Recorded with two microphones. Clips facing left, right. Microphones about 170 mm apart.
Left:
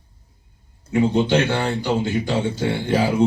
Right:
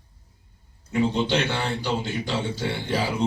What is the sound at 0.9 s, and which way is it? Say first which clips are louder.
Speech: left 5 dB; 55° left (ahead or behind).